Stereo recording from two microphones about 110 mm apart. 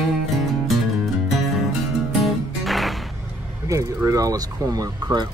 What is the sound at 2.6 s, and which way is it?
Music, centre (ahead or behind).